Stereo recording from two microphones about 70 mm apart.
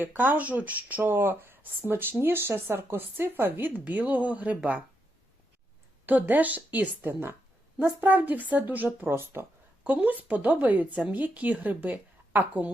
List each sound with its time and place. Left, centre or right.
0.0 s speech: right
6.1 s speech: right
7.1 s speech: right
8.0 s speech: right